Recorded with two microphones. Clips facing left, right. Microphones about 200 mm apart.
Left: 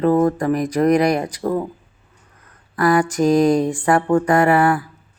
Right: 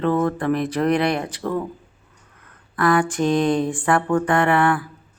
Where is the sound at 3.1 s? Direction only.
40° left (ahead or behind).